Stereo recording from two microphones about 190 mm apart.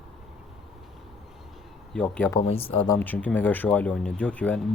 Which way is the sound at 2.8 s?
10° left (ahead or behind).